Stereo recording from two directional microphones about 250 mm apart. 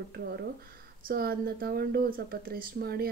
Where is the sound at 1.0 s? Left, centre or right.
Right.